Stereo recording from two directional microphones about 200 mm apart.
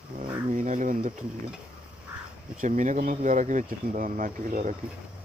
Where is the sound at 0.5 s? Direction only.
40° right (ahead or behind).